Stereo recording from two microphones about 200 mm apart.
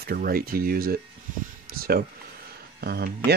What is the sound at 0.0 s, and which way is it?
Speech, 50° right (ahead or behind).